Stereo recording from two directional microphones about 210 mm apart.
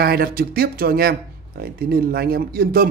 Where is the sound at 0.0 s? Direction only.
45° right (ahead or behind).